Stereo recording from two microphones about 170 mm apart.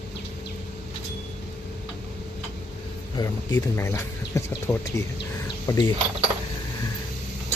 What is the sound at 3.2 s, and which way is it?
Speech, 25° left (ahead or behind).